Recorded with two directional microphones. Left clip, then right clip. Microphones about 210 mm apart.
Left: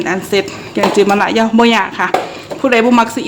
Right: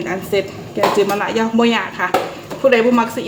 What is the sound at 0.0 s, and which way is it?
A woman's voice, 40° left (ahead or behind).